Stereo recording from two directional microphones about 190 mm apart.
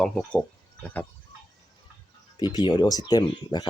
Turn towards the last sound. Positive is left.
turn(degrees=20)  # may be behind; listen again after turning